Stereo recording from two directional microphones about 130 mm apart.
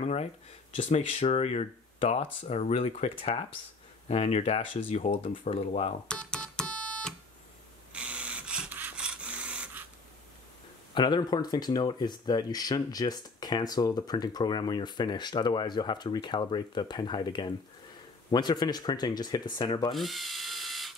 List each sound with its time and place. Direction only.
0.0 s a sound: 55° left (ahead or behind)
0.8 s speech: 55° left (ahead or behind)
6.0 s music: 5° left (ahead or behind)
7.9 s printer: 10° right (ahead or behind)
11.0 s speech: 35° left (ahead or behind)
19.9 s ratchet: centre (ahead or behind)